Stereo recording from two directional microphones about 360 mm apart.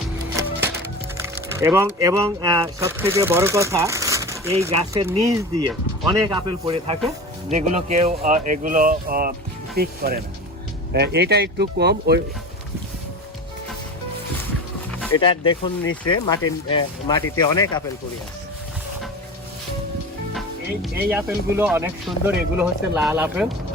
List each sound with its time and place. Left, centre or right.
0.3 s speech: centre; by 12.2 s right
15.2 s speech: centre
20.8 s speech: centre